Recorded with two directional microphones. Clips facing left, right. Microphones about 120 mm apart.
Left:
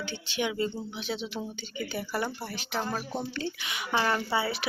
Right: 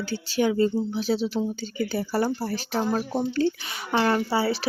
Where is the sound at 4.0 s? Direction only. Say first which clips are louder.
Right 6 dB; 30° right (ahead or behind).